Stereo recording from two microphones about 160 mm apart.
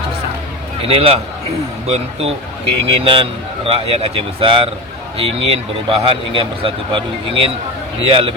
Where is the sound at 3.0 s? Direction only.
35° right (ahead or behind).